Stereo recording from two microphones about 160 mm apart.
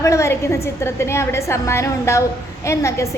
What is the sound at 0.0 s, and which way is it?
A woman's voice, 20° left (ahead or behind).